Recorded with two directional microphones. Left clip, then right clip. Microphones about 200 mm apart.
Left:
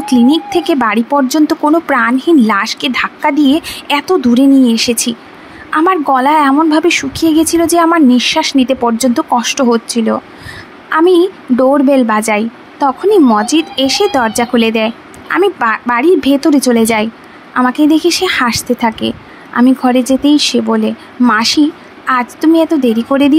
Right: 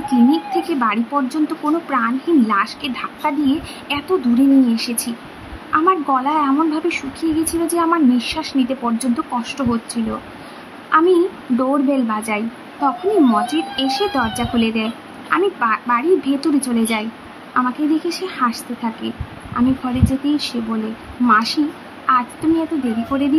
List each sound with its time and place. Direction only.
0.0 s a woman's voice: 35° left (ahead or behind)